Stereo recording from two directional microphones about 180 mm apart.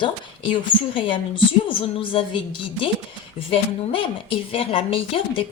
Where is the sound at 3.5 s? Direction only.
30° left (ahead or behind).